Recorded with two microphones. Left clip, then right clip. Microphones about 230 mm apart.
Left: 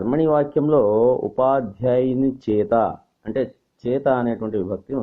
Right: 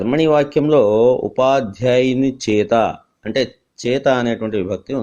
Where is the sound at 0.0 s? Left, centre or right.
Right.